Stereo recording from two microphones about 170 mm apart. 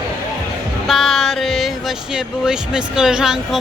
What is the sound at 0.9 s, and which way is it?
Speech, centre (ahead or behind).